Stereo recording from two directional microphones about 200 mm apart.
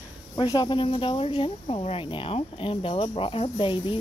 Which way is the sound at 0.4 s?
25° left (ahead or behind).